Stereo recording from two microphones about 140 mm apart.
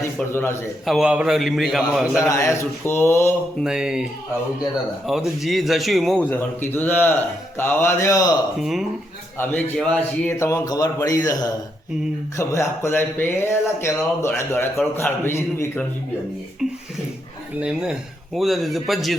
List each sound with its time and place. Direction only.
0.9 s a man's voice: 5° right (ahead or behind)
2.2 s speech: 20° left (ahead or behind)
3.6 s a man's voice: 5° right (ahead or behind)
5.0 s a man's voice: centre (ahead or behind)
6.2 s speech: 10° left (ahead or behind)
8.6 s a man's voice: centre (ahead or behind)
9.4 s speech: 15° left (ahead or behind)
10.3 s speech: 20° left (ahead or behind)
17.6 s a man's voice: 5° right (ahead or behind)